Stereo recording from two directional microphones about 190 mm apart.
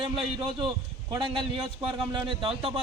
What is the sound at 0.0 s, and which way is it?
A man's voice, 25° right (ahead or behind).